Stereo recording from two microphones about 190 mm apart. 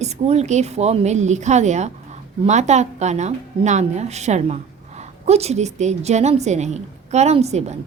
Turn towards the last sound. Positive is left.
turn(degrees=-35)  # may be behind; listen again after turning